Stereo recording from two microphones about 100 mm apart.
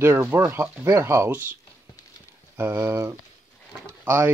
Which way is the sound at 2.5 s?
30° right (ahead or behind).